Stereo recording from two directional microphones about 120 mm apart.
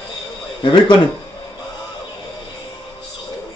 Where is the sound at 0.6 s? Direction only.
45° left (ahead or behind).